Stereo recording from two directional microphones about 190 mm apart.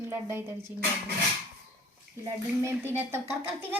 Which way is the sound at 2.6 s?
15° right (ahead or behind).